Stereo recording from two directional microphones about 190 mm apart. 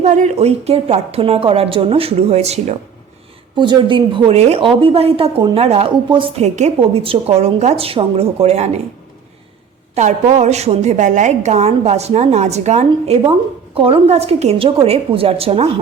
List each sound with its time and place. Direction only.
0.0 s a woman's voice: 40° right (ahead or behind)
9.9 s a woman's voice: 40° right (ahead or behind)